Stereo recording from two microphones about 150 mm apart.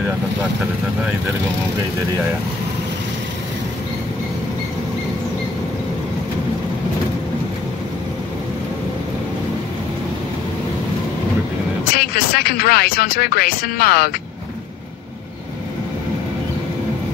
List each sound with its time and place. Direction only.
11.9 s speech: 90° left